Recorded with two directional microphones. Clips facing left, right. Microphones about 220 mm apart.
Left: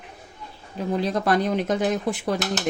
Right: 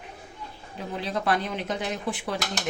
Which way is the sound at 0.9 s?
40° left (ahead or behind).